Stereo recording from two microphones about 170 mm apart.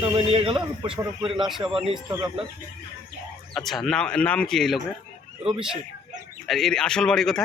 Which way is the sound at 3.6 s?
Centre (ahead or behind).